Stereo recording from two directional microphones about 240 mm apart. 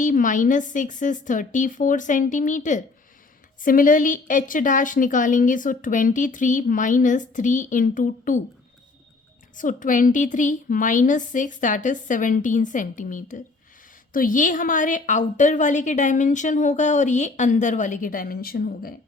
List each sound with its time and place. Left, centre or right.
0.0 s a woman's voice: left
9.6 s a woman's voice: left